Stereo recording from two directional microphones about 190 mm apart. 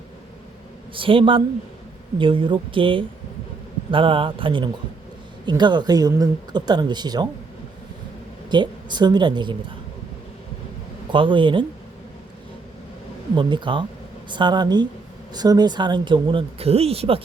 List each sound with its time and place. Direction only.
0.9 s speech: 25° right (ahead or behind)
8.4 s speech: 25° right (ahead or behind)
11.1 s speech: 25° right (ahead or behind)
13.3 s speech: 25° right (ahead or behind)